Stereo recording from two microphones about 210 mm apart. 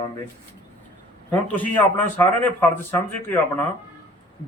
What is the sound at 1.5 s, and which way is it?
A man's voice, 10° left (ahead or behind).